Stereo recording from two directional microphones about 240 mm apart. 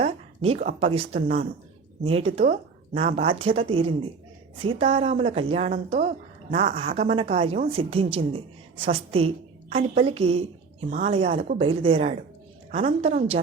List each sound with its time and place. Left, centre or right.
0.0 s a woman's voice: right